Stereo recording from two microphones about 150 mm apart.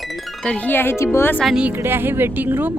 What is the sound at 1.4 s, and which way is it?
A woman's voice, 5° right (ahead or behind).